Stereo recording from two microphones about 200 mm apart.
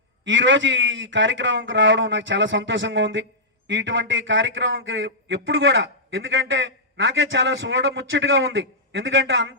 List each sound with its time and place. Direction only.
0.3 s a man's voice: 65° right (ahead or behind)